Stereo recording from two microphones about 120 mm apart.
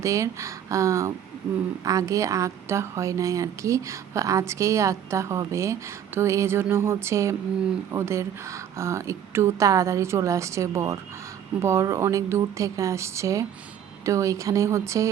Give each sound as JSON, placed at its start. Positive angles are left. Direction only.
{"t": 0.0, "sound": "a woman's voice", "side_deg": -25}